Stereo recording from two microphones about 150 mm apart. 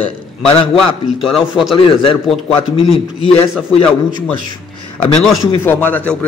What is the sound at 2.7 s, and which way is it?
Speech, 35° left (ahead or behind).